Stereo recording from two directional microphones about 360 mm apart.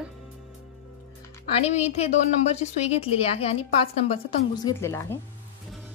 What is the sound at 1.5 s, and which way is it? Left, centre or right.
A woman's voice, centre.